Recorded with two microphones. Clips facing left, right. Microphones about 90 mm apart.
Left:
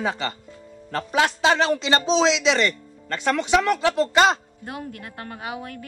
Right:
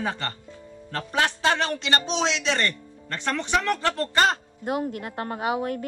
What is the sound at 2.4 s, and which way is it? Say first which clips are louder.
Speech: left 5 dB; 90° left.